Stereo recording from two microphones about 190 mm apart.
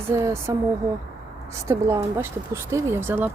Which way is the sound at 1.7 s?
15° right (ahead or behind).